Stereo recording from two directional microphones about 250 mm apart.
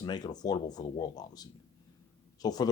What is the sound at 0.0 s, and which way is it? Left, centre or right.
Speech, centre.